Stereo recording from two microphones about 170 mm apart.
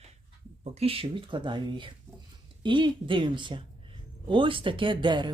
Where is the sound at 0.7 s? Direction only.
35° right (ahead or behind).